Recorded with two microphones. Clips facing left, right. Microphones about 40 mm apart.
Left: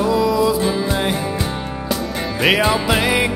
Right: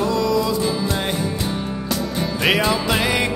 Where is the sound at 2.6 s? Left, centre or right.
Centre.